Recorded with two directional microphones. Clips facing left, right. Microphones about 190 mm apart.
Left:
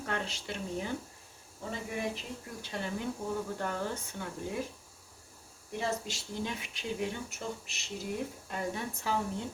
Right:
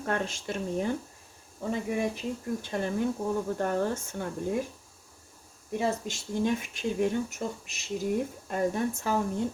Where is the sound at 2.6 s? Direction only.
50° right (ahead or behind).